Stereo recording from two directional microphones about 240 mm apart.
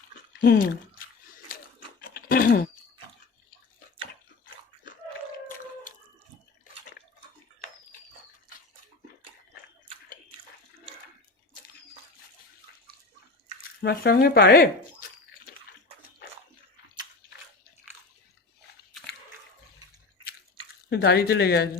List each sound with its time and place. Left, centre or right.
0.4 s speech: left
2.0 s a sound: left
13.8 s speech: left
20.9 s speech: left